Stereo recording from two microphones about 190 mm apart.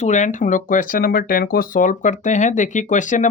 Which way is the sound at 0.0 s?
40° left (ahead or behind).